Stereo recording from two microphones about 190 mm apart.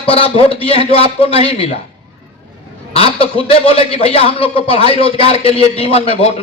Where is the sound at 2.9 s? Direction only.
30° left (ahead or behind).